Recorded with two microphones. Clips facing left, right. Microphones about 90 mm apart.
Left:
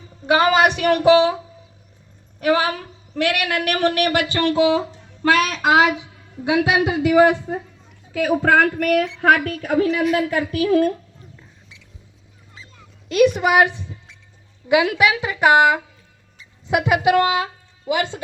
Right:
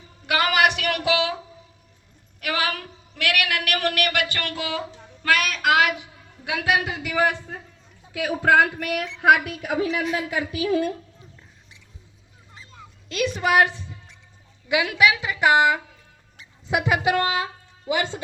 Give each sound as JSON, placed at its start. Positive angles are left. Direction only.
{"t": 0.3, "sound": "a woman's voice", "side_deg": 25}
{"t": 2.4, "sound": "a woman's voice", "side_deg": 25}
{"t": 8.3, "sound": "a sound", "side_deg": 0}
{"t": 9.2, "sound": "a woman's voice", "side_deg": -10}
{"t": 13.1, "sound": "speech", "side_deg": 20}
{"t": 14.7, "sound": "a woman's voice", "side_deg": 25}